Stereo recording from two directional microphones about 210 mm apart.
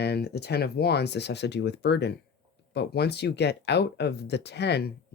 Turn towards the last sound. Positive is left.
turn(degrees=55)  # may be behind; listen again after turning